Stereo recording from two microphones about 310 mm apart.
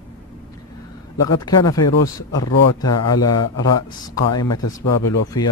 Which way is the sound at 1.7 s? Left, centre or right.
Left.